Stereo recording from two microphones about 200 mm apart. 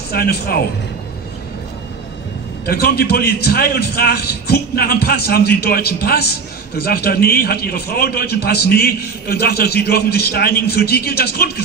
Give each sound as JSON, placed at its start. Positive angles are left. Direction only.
{"t": 0.1, "sound": "a man's voice", "side_deg": 50}
{"t": 2.6, "sound": "a man's voice", "side_deg": 50}